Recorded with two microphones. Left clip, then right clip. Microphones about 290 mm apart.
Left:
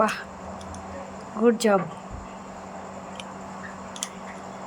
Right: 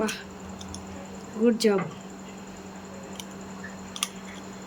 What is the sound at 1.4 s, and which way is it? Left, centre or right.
Speech, centre.